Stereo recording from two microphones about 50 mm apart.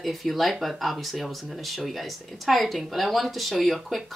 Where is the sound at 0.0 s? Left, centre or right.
Centre.